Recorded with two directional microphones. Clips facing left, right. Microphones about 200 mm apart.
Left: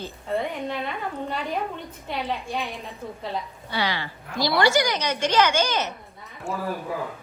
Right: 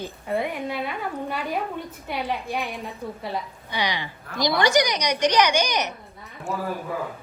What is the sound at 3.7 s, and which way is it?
A woman's voice, 15° right (ahead or behind).